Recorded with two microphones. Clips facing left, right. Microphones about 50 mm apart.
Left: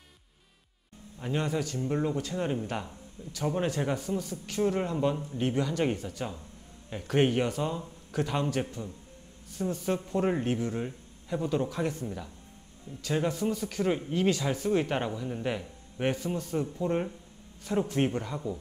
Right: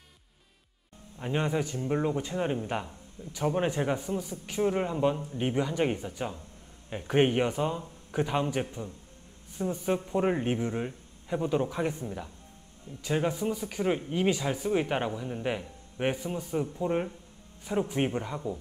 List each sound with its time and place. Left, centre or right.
1.2 s speech: right